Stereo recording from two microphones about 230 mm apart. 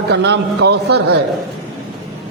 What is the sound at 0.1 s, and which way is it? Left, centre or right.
Speech, right.